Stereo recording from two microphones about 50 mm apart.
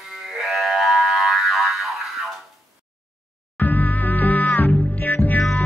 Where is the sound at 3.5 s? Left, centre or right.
Left.